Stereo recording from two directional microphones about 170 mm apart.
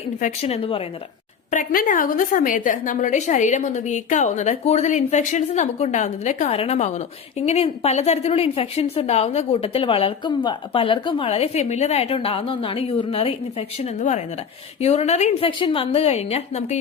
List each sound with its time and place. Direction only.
0.2 s a woman's voice: 35° left (ahead or behind)
1.5 s a woman's voice: 55° left (ahead or behind)